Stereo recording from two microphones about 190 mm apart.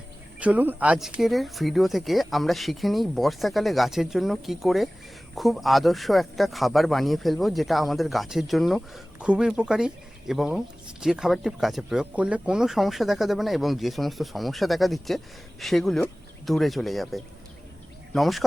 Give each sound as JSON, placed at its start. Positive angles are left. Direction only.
{"t": 0.3, "sound": "speech", "side_deg": -5}